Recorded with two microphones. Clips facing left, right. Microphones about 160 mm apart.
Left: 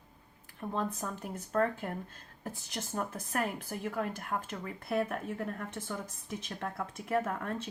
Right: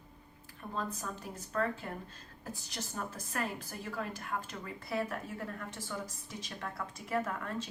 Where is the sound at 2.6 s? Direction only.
50° left (ahead or behind).